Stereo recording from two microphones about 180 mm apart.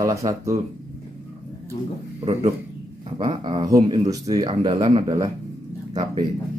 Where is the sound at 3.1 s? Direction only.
25° right (ahead or behind).